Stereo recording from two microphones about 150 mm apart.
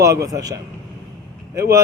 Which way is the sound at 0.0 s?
20° right (ahead or behind).